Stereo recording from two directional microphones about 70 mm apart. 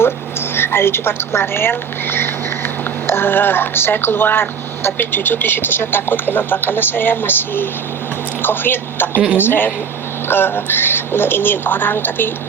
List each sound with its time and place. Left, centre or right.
0.0 s a woman's voice: left